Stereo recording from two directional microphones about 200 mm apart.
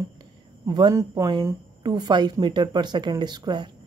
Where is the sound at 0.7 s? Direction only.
20° right (ahead or behind).